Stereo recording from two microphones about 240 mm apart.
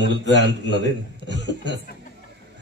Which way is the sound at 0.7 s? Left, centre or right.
Right.